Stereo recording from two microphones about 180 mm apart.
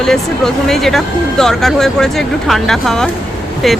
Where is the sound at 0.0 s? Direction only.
Centre (ahead or behind).